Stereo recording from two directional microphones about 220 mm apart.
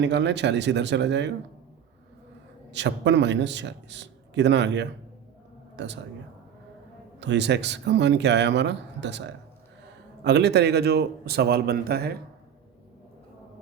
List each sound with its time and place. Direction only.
0.0 s speech: 50° right (ahead or behind)
2.7 s speech: 55° right (ahead or behind)
7.2 s speech: 50° right (ahead or behind)